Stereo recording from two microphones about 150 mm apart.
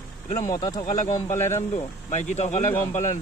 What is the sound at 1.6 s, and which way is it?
Speech, 50° left (ahead or behind).